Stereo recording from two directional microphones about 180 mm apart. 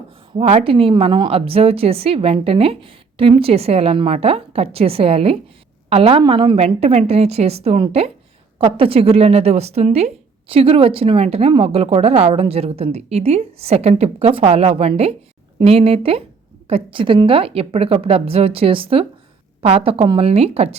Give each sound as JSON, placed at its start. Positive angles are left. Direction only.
{"t": 0.3, "sound": "a woman's voice", "side_deg": -30}